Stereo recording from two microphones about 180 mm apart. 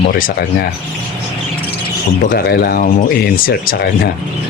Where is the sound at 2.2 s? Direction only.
55° left (ahead or behind).